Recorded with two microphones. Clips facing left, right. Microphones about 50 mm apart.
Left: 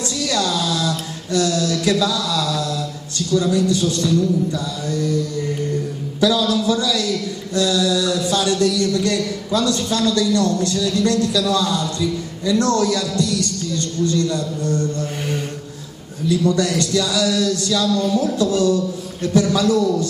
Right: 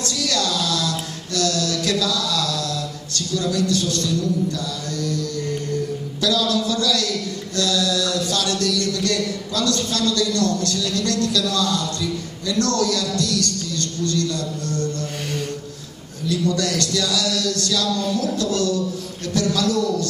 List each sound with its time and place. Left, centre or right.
0.0 s speech: centre
6.2 s a man's voice: centre
16.3 s a man's voice: centre